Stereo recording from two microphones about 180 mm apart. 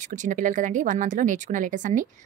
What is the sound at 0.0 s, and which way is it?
Speech, 45° right (ahead or behind).